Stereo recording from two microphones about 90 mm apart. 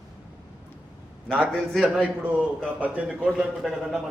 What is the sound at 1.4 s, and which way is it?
Speech, centre (ahead or behind).